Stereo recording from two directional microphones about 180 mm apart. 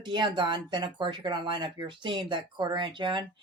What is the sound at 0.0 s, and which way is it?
Speech, 25° right (ahead or behind).